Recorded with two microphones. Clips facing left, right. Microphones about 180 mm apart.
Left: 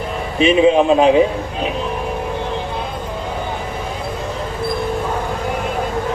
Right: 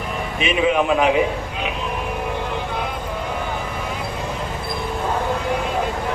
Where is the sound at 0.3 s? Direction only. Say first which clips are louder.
Left 7 dB; 30° left (ahead or behind).